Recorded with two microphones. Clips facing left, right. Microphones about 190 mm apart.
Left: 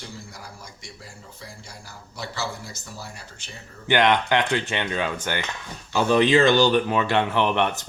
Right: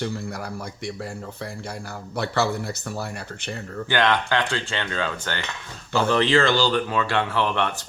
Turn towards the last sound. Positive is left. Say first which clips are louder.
# left 2 dB
turn(degrees=20)  # may be behind; listen again after turning